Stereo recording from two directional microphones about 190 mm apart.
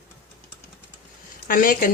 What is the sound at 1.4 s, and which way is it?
Speech, 45° left (ahead or behind).